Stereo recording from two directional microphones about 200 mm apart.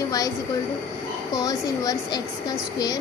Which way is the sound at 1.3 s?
20° left (ahead or behind).